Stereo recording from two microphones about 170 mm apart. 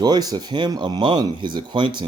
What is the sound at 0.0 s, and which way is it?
A man's voice, 25° right (ahead or behind).